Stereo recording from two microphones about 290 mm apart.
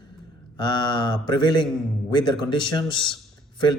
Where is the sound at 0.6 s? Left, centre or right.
Centre.